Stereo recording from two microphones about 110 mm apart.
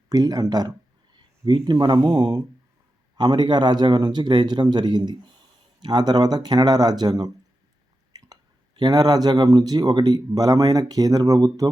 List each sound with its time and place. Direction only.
0.1 s speech: 35° right (ahead or behind)
8.3 s speech: 40° right (ahead or behind)